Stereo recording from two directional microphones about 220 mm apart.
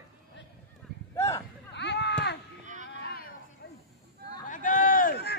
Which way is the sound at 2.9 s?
45° left (ahead or behind).